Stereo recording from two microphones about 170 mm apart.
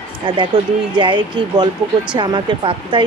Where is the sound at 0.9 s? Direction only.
30° right (ahead or behind).